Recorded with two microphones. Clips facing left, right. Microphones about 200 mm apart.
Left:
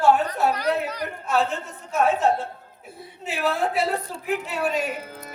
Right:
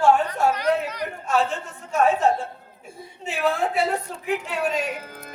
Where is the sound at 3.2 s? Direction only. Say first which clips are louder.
Right 1 dB; 5° left (ahead or behind).